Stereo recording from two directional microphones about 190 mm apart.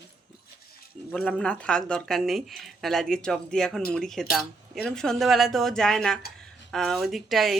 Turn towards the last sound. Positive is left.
turn(degrees=0)  # may be behind; listen again after turning